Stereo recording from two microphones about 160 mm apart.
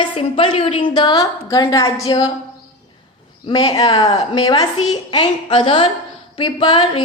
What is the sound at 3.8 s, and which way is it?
A woman's voice, 35° left (ahead or behind).